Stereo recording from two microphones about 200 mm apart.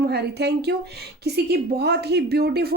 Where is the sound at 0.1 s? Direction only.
55° right (ahead or behind).